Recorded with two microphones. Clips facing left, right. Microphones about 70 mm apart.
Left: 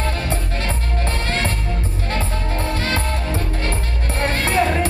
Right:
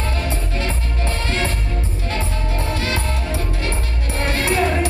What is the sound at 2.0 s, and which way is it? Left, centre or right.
Music, left.